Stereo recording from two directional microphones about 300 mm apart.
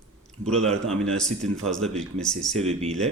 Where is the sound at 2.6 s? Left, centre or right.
Right.